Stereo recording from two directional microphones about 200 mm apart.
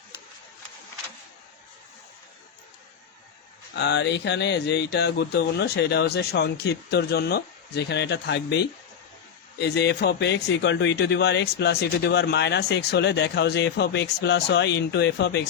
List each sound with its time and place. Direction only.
3.8 s speech: 60° left (ahead or behind)